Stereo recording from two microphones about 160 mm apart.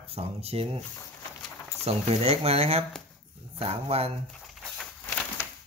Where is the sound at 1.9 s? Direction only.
40° right (ahead or behind).